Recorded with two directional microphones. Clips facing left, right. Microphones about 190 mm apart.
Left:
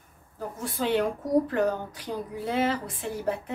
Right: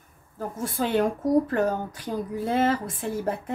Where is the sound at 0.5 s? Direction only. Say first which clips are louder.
Right 1 dB; 45° right (ahead or behind).